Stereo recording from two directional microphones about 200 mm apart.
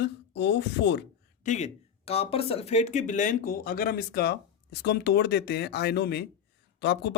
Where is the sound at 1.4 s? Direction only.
35° left (ahead or behind).